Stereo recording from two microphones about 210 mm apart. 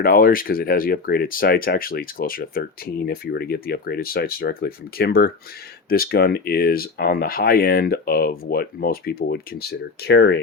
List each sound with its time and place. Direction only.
0.0 s speech: 45° left (ahead or behind)